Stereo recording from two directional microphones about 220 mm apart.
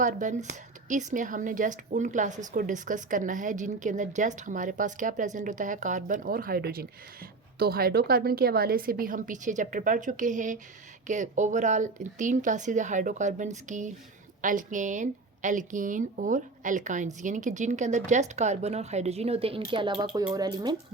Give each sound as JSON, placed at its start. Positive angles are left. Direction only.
{"t": 0.0, "sound": "a woman's voice", "side_deg": -35}